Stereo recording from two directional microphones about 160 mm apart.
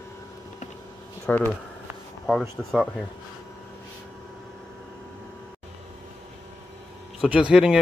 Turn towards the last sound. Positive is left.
turn(degrees=-5)  # may be behind; listen again after turning